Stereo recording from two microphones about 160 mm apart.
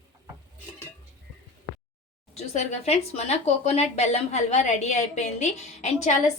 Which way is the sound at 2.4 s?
45° left (ahead or behind).